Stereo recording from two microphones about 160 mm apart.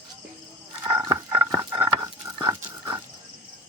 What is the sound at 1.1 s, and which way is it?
Dog, 20° right (ahead or behind).